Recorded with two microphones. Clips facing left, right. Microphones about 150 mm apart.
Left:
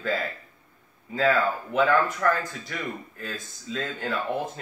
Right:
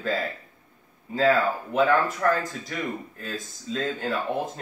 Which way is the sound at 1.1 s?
35° right (ahead or behind).